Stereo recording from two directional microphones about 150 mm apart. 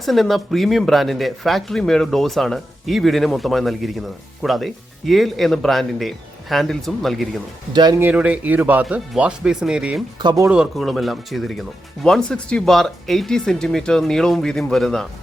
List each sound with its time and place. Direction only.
0.0 s speech: centre (ahead or behind)
7.7 s speech: 30° right (ahead or behind)
7.9 s speech: 10° right (ahead or behind)
10.2 s speech: 25° right (ahead or behind)
10.5 s speech: centre (ahead or behind)